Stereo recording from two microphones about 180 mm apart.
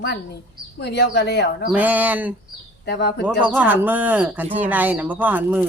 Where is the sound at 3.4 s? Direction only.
10° right (ahead or behind).